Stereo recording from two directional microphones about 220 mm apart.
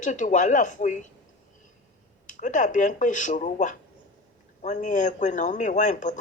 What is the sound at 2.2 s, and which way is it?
Speech, 35° left (ahead or behind).